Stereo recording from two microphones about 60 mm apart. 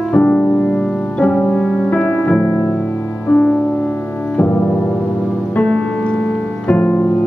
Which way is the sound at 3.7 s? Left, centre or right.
Left.